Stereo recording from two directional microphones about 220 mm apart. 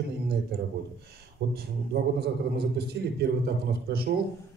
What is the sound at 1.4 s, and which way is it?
A man's voice, 45° right (ahead or behind).